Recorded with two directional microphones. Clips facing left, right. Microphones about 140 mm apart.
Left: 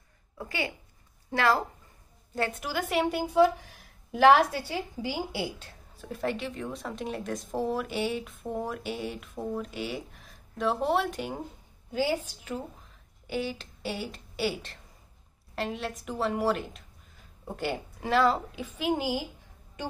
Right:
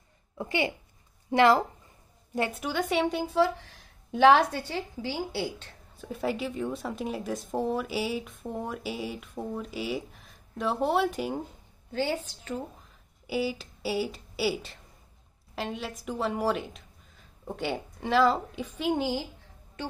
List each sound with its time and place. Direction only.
0.4 s a woman's voice: 20° right (ahead or behind)
2.5 s a woman's voice: centre (ahead or behind)
5.9 s a woman's voice: centre (ahead or behind)
11.9 s a woman's voice: 10° left (ahead or behind)
12.8 s a sound: 5° right (ahead or behind)
15.5 s a woman's voice: centre (ahead or behind)